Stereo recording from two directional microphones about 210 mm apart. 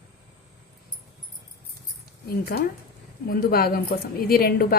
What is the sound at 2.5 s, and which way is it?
A woman's voice, 45° left (ahead or behind).